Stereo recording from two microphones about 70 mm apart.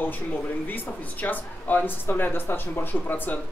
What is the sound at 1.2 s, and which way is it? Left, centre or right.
Speech, left.